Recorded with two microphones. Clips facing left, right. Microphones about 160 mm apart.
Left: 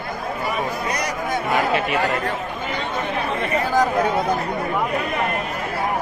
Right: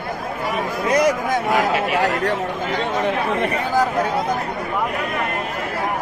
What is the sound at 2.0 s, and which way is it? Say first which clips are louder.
Speech: right 3 dB; 85° right.